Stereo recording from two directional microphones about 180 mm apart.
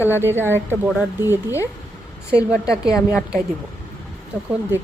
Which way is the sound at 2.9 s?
15° left (ahead or behind).